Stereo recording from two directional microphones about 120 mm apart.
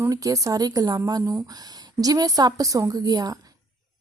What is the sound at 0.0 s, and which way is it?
A woman's voice, 30° right (ahead or behind).